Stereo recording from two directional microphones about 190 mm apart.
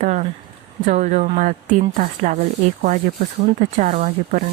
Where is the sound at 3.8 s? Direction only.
45° right (ahead or behind).